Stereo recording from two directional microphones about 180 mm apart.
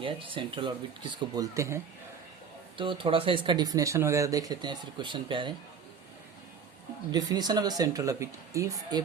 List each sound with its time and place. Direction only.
0.0 s speech: 30° right (ahead or behind)
2.7 s speech: 30° right (ahead or behind)
7.1 s speech: 20° right (ahead or behind)